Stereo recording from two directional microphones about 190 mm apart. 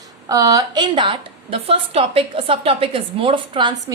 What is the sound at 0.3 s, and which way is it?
A woman's voice, 15° right (ahead or behind).